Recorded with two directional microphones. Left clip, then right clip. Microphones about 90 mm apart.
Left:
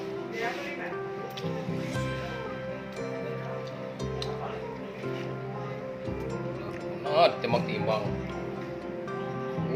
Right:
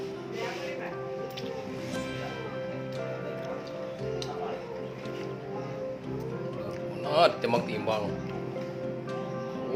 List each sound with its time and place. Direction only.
7.1 s speech: 20° right (ahead or behind)